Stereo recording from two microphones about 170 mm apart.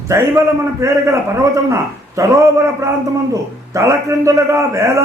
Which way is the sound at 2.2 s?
20° right (ahead or behind).